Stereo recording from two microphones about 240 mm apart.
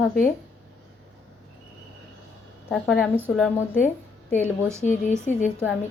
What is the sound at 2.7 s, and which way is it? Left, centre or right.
Speech, centre.